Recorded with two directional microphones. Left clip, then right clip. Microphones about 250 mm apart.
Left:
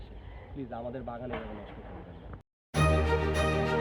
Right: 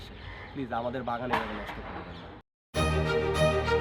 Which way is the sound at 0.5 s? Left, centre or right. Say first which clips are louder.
Right 6 dB; centre.